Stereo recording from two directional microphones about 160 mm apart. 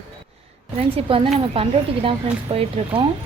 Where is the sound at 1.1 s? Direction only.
35° right (ahead or behind).